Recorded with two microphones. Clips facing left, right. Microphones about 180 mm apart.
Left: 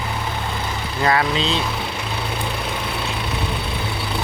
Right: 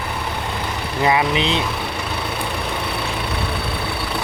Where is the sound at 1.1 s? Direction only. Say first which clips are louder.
Right 1 dB; 15° right (ahead or behind).